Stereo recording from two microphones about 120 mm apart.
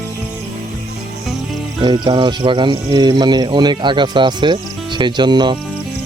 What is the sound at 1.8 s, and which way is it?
Speech, 40° right (ahead or behind).